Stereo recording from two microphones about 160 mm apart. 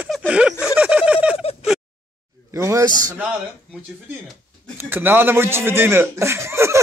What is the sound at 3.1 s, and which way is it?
Speech, 10° right (ahead or behind).